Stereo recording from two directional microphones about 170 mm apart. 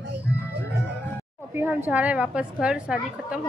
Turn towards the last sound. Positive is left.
turn(degrees=-5)  # may be behind; listen again after turning